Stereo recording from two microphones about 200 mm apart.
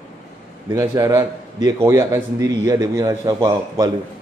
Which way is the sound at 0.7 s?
15° right (ahead or behind).